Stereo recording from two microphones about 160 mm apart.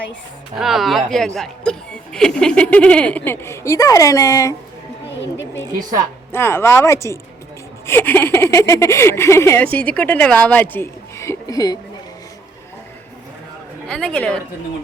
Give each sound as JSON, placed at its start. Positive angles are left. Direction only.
{"t": 0.6, "sound": "speech", "side_deg": 0}
{"t": 6.3, "sound": "speech", "side_deg": 15}
{"t": 13.8, "sound": "a woman's voice", "side_deg": 5}